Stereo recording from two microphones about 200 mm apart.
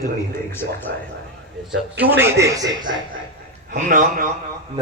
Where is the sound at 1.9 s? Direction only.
10° right (ahead or behind).